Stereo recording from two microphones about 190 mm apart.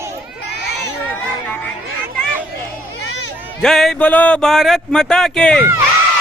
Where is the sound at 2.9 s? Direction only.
70° left (ahead or behind).